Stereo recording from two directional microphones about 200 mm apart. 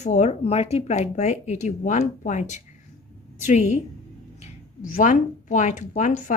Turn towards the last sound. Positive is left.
turn(degrees=40)  # may be behind; listen again after turning